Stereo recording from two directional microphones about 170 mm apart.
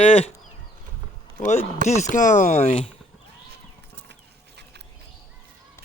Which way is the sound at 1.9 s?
45° left (ahead or behind).